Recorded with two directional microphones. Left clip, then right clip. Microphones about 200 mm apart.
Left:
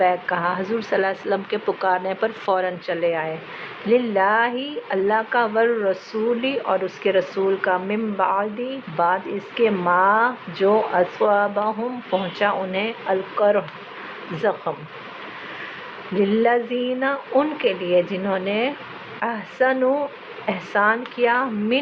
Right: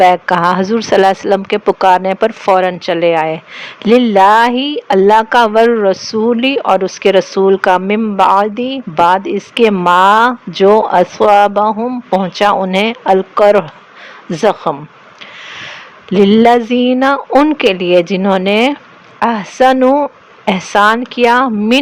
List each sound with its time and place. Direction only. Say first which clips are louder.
0.0 s speech: right 11 dB; 55° right (ahead or behind)
16.1 s speech: right 11 dB; 60° right (ahead or behind)